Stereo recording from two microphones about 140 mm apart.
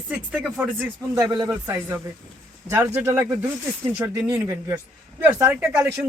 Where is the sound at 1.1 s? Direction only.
25° right (ahead or behind).